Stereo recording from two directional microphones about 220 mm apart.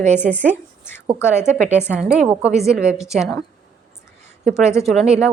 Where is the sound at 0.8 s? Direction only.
10° left (ahead or behind).